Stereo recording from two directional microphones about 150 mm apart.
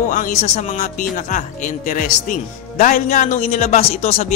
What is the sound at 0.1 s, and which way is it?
Speech, 55° left (ahead or behind).